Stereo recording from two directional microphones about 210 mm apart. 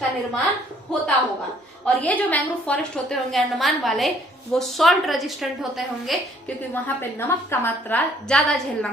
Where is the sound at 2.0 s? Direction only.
5° left (ahead or behind).